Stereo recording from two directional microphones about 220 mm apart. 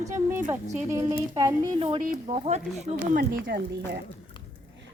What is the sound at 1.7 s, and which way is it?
Speech, 25° right (ahead or behind).